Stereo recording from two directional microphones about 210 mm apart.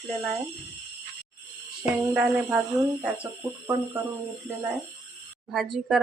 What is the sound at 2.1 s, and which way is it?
Speech, 5° right (ahead or behind).